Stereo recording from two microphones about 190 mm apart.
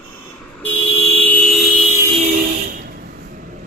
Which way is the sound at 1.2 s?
5° left (ahead or behind).